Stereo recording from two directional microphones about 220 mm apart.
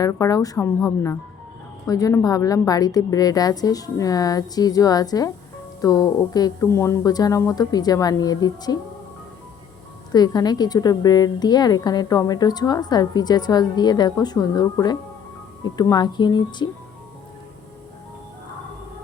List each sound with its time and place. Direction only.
0.0 s a woman's voice: 15° left (ahead or behind)
10.1 s a woman's voice: 15° left (ahead or behind)